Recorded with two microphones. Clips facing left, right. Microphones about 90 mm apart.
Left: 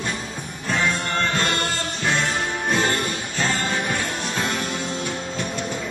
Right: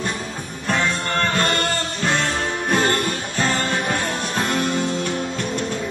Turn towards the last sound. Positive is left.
turn(degrees=-60)  # may be behind; listen again after turning